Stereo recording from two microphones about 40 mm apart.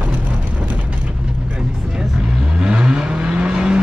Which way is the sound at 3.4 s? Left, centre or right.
Right.